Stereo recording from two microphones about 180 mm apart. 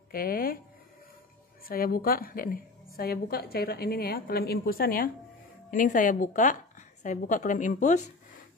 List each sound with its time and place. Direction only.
0.1 s a woman's voice: 55° left (ahead or behind)
1.7 s a woman's voice: 55° left (ahead or behind)